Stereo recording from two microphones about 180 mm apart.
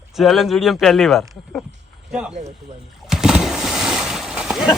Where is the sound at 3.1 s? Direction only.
5° right (ahead or behind).